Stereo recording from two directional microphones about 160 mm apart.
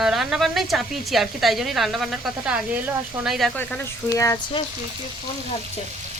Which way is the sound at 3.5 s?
10° left (ahead or behind).